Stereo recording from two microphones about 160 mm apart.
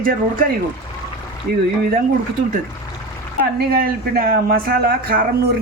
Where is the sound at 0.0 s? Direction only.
60° right (ahead or behind).